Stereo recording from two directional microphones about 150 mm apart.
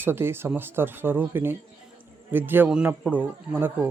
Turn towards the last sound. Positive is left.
turn(degrees=-10)  # may be behind; listen again after turning